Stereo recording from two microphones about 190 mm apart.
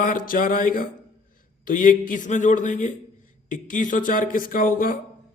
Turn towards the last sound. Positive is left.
turn(degrees=50)  # may be behind; listen again after turning